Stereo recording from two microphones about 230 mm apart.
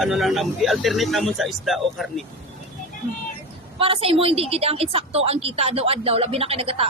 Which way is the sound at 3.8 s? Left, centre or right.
Right.